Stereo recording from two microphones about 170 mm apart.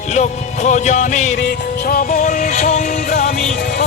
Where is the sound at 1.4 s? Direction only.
85° left.